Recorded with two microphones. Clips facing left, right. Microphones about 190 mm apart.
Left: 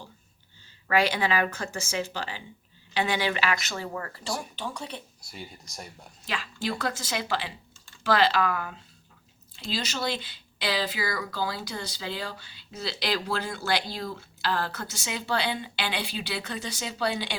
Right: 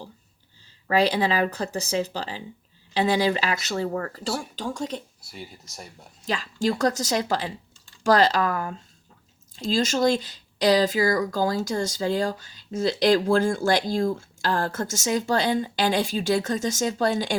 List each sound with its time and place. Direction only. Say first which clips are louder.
0.9 s speech: right 3 dB; 35° right (ahead or behind)
5.3 s speech: right 2 dB; centre (ahead or behind)
6.2 s speech: right 7 dB; 40° right (ahead or behind)